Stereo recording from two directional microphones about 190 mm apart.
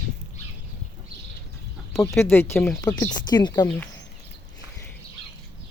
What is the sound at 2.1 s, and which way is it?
Speech, 10° left (ahead or behind).